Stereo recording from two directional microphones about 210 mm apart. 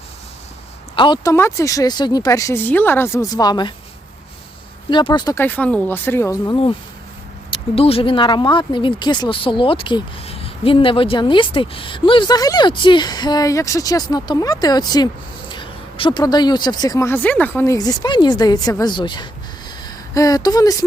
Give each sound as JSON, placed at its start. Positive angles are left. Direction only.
{"t": 0.9, "sound": "speech", "side_deg": 20}
{"t": 4.9, "sound": "speech", "side_deg": 20}